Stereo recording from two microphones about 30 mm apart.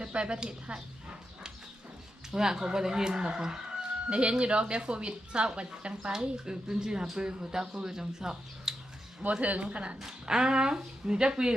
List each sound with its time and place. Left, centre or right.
0.0 s speech: right
0.3 s speech: right
2.3 s speech: right
4.1 s speech: right
6.1 s speech: right
9.4 s speech: right
10.0 s speech: centre